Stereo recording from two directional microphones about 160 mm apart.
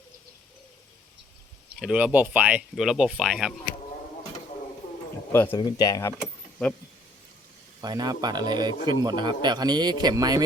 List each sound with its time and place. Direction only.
1.8 s speech: 5° right (ahead or behind)
5.3 s speech: 15° left (ahead or behind)
5.5 s speech: 25° left (ahead or behind)
7.8 s speech: 25° right (ahead or behind)